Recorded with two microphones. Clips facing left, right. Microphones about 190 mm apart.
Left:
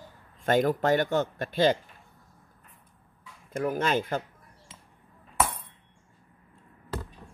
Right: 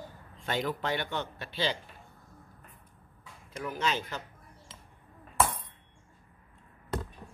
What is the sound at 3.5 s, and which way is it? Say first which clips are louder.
Speech: left 6 dB; 50° left (ahead or behind).